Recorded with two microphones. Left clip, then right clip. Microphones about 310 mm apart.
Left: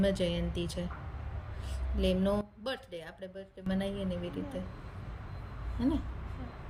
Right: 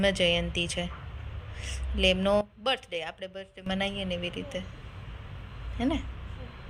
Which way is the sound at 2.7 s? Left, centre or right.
Centre.